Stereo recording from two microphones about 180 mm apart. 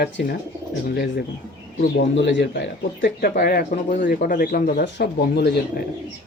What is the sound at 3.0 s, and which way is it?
Speech, 55° left (ahead or behind).